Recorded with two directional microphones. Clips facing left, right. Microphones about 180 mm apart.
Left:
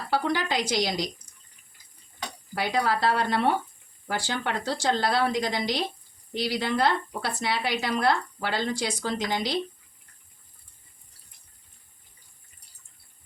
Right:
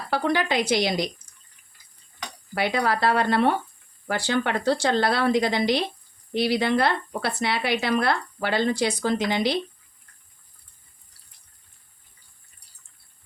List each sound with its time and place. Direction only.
0.1 s speech: 60° right (ahead or behind)
2.6 s speech: 65° right (ahead or behind)